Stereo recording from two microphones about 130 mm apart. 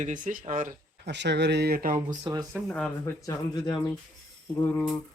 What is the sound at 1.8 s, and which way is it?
Speech, 90° right.